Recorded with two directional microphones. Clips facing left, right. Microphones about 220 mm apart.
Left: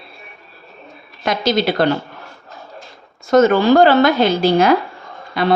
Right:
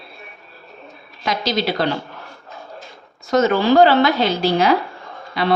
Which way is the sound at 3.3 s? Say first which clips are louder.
Left 4 dB; 50° left (ahead or behind).